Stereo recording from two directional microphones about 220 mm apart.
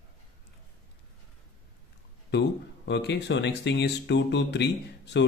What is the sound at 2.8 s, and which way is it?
Speech, 50° left (ahead or behind).